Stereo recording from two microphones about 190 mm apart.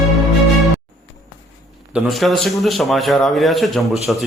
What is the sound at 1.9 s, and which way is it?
A man's voice, centre (ahead or behind).